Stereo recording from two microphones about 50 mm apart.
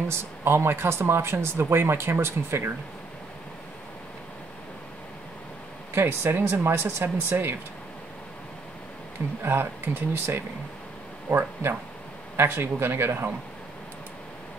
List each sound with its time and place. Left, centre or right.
0.1 s speech: right
5.9 s speech: right
9.4 s speech: right